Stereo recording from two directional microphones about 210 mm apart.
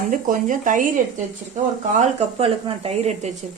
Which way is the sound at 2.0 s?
30° right (ahead or behind).